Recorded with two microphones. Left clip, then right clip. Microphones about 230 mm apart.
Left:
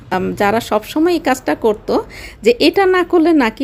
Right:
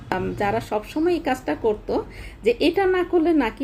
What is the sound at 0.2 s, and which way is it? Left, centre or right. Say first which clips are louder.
Speech: left 10 dB; left.